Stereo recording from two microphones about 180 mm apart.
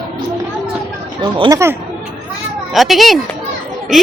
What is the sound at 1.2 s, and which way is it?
Speech, 25° right (ahead or behind).